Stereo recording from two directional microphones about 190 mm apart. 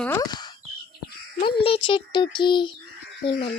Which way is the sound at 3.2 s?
50° left (ahead or behind).